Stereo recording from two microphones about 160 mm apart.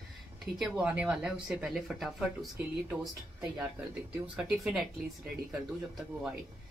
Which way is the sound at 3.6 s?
5° right (ahead or behind).